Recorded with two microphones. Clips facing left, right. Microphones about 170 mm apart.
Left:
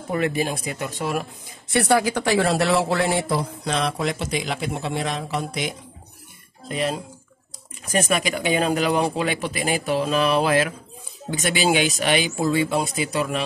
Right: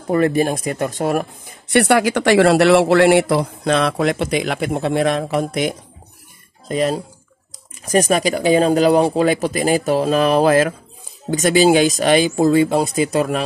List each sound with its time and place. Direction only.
0.1 s speech: 45° right (ahead or behind)
1.7 s speech: 70° right (ahead or behind); by 13.4 s 45° right (ahead or behind)